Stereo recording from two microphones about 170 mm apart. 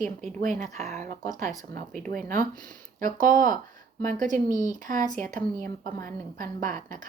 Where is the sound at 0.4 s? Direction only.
45° right (ahead or behind).